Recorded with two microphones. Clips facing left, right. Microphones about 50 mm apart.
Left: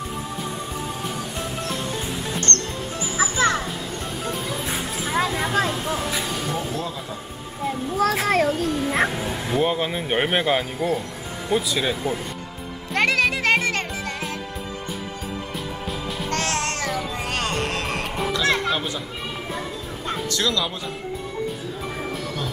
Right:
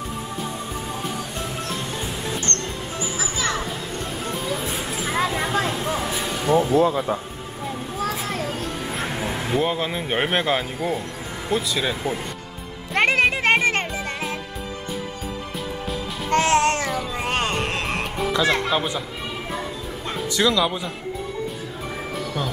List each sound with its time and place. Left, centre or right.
2.4 s music: right
3.2 s music: left
4.2 s music: centre
5.4 s vehicle: centre
6.4 s speech: right
8.0 s a child's voice: left
9.1 s bow-wow: centre
9.6 s speech: centre
13.0 s music: right
16.3 s music: right
18.5 s speech: centre
20.3 s speech: centre
22.1 s music: centre